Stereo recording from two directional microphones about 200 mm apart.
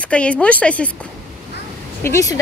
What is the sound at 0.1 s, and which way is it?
Speech, 5° left (ahead or behind).